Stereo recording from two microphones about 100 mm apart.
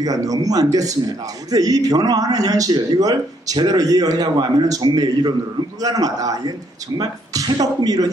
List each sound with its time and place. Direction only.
0.0 s a man's voice: 35° right (ahead or behind)